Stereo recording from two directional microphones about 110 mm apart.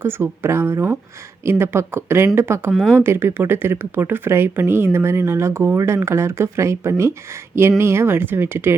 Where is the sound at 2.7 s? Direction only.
5° left (ahead or behind).